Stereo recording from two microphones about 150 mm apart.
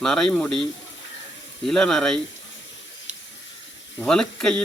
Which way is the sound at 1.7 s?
5° left (ahead or behind).